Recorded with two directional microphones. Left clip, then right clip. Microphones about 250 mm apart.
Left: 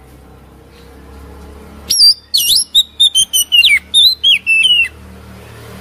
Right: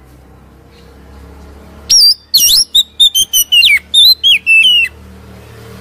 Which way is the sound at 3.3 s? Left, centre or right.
Centre.